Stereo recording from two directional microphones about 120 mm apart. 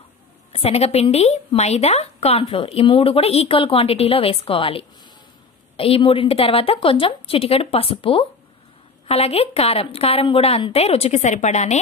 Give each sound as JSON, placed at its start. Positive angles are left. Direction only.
{"t": 0.5, "sound": "a woman's voice", "side_deg": 55}